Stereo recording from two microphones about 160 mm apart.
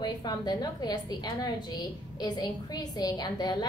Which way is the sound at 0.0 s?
25° left (ahead or behind).